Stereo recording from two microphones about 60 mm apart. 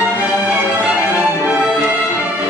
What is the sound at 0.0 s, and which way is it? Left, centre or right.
Music, right.